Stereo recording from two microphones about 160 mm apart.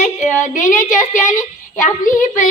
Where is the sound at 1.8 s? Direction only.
55° left (ahead or behind).